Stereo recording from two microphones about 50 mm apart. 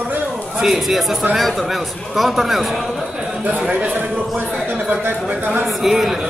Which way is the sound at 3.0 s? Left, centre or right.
Centre.